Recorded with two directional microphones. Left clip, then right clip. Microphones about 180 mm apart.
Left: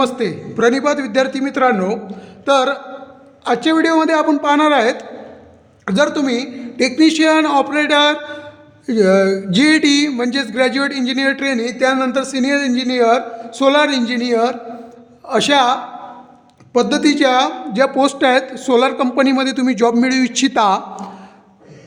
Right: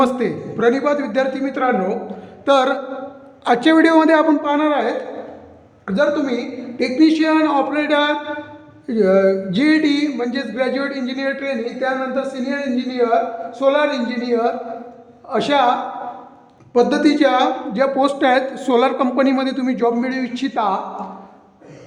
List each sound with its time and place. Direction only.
0.0 s a man's voice: 20° left (ahead or behind)
2.4 s mantra: 20° left (ahead or behind)
3.4 s a man's voice: 15° left (ahead or behind); by 4.9 s 30° left (ahead or behind)
5.8 s speech: 45° left (ahead or behind)
8.9 s a sound: 35° left (ahead or behind)
16.7 s speech: 40° left (ahead or behind)